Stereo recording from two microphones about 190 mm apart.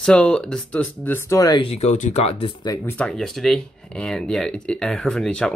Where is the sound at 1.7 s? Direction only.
35° left (ahead or behind).